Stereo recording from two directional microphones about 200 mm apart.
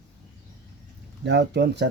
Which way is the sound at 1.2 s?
60° right (ahead or behind).